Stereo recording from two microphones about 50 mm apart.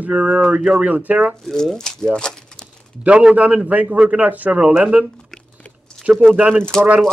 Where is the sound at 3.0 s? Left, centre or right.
Centre.